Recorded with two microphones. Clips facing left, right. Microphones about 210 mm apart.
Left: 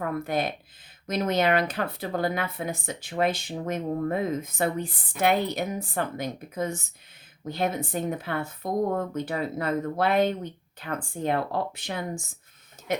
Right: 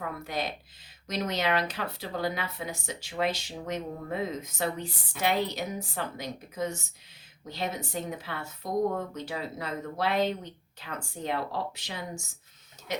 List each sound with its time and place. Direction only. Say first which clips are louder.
0.0 s speech: left 6 dB; 55° left (ahead or behind)